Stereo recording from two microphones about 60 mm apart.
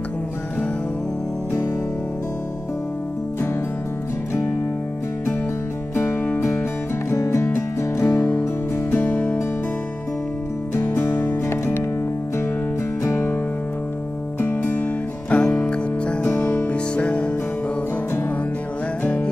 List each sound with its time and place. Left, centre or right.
7.2 s music: left
8.9 s music: left
10.8 s music: left
13.0 s music: left
14.4 s music: left